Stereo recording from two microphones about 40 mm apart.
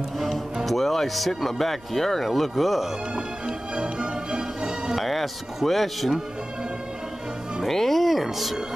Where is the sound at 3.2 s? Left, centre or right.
Right.